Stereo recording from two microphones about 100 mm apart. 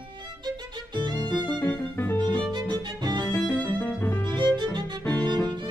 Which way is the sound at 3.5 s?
15° left (ahead or behind).